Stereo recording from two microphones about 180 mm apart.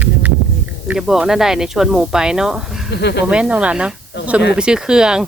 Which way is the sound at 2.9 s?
70° left (ahead or behind).